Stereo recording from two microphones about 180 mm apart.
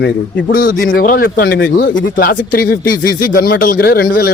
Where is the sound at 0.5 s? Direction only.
50° left (ahead or behind).